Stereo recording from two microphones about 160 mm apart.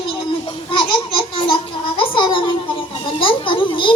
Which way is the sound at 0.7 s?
30° left (ahead or behind).